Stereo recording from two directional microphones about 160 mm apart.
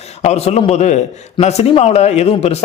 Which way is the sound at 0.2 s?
40° left (ahead or behind).